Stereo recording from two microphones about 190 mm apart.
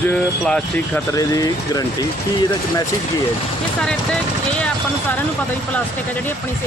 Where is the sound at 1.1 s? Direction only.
15° left (ahead or behind).